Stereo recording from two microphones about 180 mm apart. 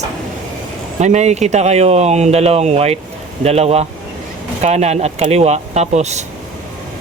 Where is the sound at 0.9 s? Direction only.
40° right (ahead or behind).